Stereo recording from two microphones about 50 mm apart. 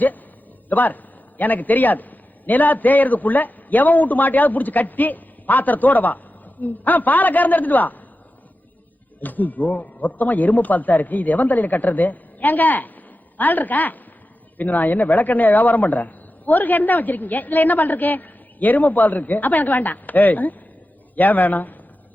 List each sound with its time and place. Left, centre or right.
0.7 s a man's voice: left
9.2 s a man's voice: left